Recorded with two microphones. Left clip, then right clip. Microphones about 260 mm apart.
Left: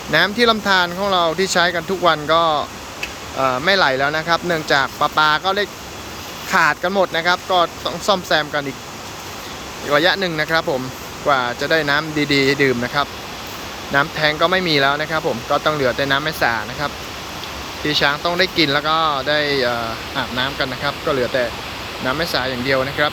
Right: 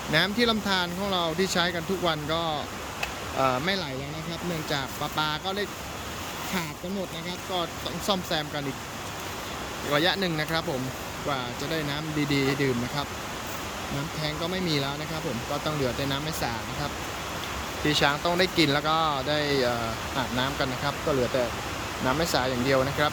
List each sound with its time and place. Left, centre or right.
0.1 s speech: centre
9.9 s speech: centre
14.2 s speech: centre